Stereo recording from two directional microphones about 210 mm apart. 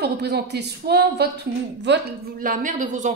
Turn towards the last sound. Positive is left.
turn(degrees=-35)  # may be behind; listen again after turning